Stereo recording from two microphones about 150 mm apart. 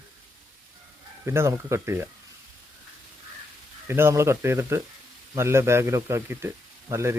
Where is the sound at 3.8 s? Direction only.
15° right (ahead or behind).